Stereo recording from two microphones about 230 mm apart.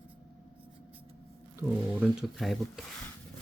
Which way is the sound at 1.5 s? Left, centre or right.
Centre.